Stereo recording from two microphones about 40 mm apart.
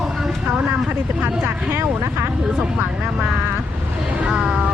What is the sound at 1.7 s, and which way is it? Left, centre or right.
Speech, right.